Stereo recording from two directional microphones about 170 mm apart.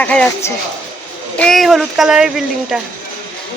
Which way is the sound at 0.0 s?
10° left (ahead or behind).